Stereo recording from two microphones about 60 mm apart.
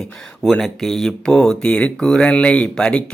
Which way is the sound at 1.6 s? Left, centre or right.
Left.